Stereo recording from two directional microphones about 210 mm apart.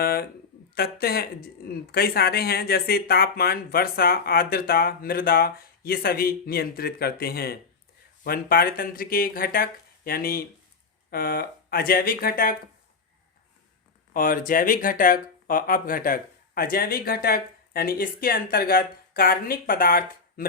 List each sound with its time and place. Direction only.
0.0 s speech: 45° left (ahead or behind)
14.1 s speech: 40° left (ahead or behind)